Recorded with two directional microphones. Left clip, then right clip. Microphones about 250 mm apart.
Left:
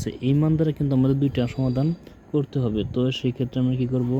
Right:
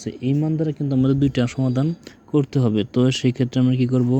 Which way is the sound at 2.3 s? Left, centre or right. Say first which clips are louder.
Right 5 dB; right.